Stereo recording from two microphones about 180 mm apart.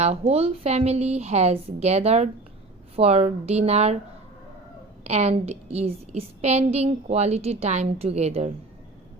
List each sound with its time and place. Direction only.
0.0 s a woman's voice: 35° right (ahead or behind)
5.0 s a woman's voice: 35° right (ahead or behind)